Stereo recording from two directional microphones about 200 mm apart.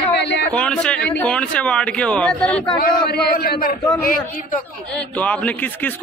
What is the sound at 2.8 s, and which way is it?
Speech, 50° left (ahead or behind).